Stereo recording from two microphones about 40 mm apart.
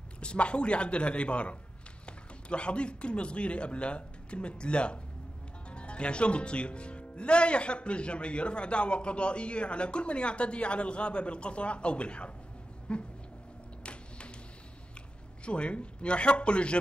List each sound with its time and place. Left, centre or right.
0.2 s a man's voice: left
13.8 s a sound: left
15.4 s speech: left